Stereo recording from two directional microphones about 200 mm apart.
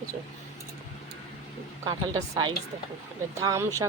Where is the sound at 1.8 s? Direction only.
15° right (ahead or behind).